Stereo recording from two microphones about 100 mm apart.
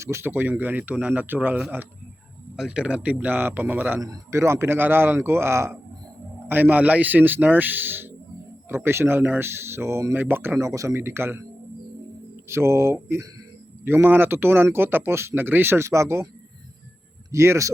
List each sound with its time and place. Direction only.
0.0 s speech: 25° right (ahead or behind)
2.6 s speech: 5° right (ahead or behind)
4.0 s speech: 35° right (ahead or behind)
12.5 s speech: 25° right (ahead or behind)
17.3 s speech: 30° right (ahead or behind)